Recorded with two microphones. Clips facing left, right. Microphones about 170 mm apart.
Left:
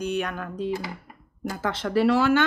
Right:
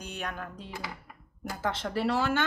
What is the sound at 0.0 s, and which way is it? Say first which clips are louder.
Speech: left 10 dB; 75° left (ahead or behind).